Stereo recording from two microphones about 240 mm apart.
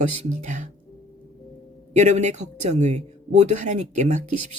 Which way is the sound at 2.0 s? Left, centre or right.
Right.